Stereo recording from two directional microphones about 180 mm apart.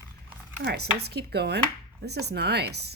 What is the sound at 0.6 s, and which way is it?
Speech, 65° right (ahead or behind).